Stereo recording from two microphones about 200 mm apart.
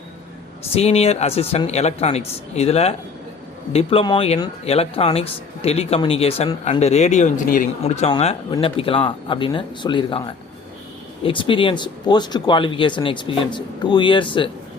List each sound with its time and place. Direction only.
0.7 s speech: 30° left (ahead or behind)